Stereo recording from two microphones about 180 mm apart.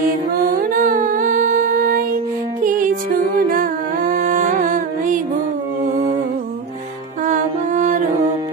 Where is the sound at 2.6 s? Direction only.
50° right (ahead or behind).